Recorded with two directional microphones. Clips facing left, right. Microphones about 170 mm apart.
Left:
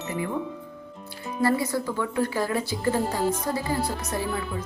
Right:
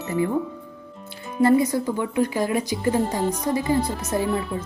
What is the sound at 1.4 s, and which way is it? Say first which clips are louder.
Speech: right 6 dB; 20° right (ahead or behind).